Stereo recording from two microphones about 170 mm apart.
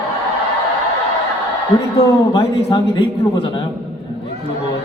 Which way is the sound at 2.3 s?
25° left (ahead or behind).